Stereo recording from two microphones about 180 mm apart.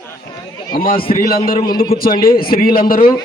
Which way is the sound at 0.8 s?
55° left (ahead or behind).